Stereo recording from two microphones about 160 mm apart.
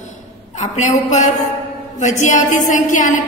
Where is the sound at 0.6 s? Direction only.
50° left (ahead or behind).